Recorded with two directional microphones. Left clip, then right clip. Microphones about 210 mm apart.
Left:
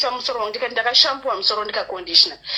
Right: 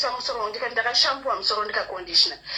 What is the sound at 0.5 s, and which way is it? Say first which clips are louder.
Speech: left 6 dB; 35° left (ahead or behind).